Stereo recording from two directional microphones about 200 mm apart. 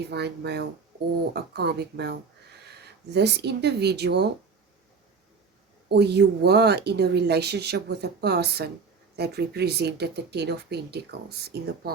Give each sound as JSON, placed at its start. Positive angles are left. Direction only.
{"t": 0.1, "sound": "speech", "side_deg": -55}
{"t": 5.9, "sound": "speech", "side_deg": -55}